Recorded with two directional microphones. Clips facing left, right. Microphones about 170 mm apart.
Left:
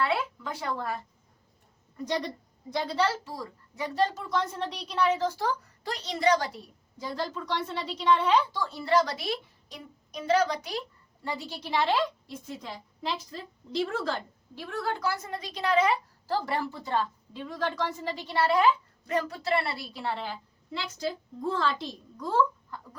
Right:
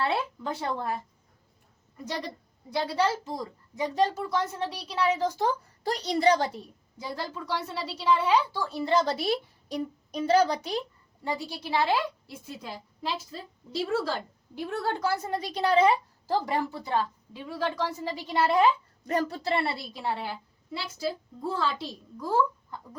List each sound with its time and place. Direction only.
0.0 s speech: 30° right (ahead or behind)
2.0 s a woman's voice: 10° right (ahead or behind)
5.8 s a woman's voice: 35° right (ahead or behind)
7.0 s a woman's voice: 10° right (ahead or behind)
9.0 s a woman's voice: 35° right (ahead or behind)
11.2 s a woman's voice: 15° right (ahead or behind)
14.8 s a woman's voice: 30° right (ahead or behind)
16.2 s a woman's voice: 15° right (ahead or behind)
19.0 s a woman's voice: 35° right (ahead or behind); by 22.8 s 10° right (ahead or behind)